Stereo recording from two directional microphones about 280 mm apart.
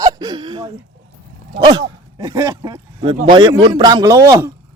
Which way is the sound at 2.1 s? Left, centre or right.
Centre.